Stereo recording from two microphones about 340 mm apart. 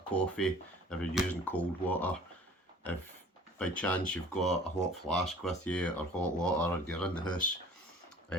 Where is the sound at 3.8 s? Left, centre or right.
Centre.